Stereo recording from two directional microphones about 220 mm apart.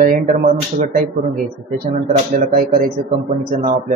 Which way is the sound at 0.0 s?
40° right (ahead or behind).